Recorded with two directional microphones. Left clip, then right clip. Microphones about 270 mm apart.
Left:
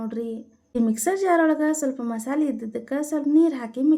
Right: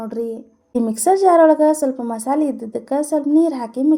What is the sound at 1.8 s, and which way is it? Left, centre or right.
A woman's voice, right.